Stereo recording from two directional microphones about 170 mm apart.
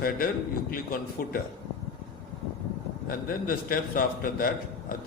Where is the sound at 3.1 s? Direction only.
55° left (ahead or behind).